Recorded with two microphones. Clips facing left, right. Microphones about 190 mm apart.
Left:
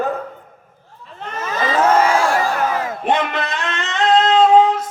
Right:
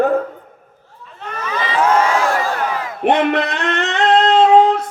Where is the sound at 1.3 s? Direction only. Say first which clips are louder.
Left 2 dB; 45° left (ahead or behind).